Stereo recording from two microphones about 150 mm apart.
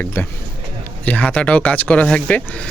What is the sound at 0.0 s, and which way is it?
Speech, 15° left (ahead or behind).